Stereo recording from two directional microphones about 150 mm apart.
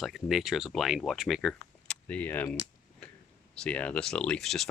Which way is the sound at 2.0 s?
10° left (ahead or behind).